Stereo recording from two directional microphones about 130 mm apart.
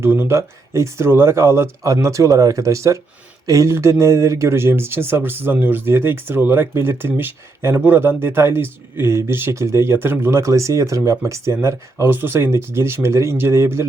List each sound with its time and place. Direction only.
0.0 s speech: 20° right (ahead or behind)